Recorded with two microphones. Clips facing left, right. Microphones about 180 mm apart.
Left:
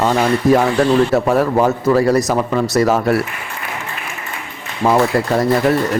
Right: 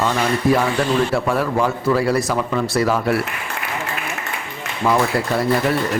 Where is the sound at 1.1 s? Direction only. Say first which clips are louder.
Left 5 dB; 45° left (ahead or behind).